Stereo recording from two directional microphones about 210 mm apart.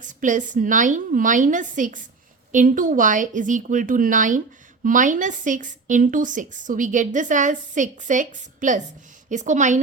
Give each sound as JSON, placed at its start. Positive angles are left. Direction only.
{"t": 0.0, "sound": "a woman's voice", "side_deg": -40}